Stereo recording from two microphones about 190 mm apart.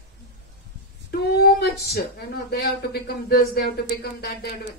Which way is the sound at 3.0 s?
55° left (ahead or behind).